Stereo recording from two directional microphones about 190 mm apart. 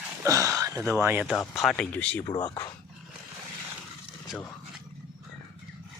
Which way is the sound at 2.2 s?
25° left (ahead or behind).